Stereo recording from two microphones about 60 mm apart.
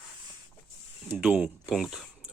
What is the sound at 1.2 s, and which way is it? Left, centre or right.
Speech, right.